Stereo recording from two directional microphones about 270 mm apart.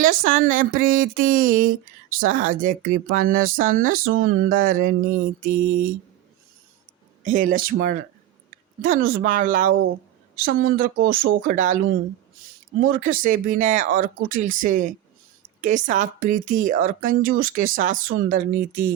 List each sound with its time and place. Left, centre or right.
0.0 s speech: right
5.5 s mantra: right
7.3 s speech: right
12.9 s speech: right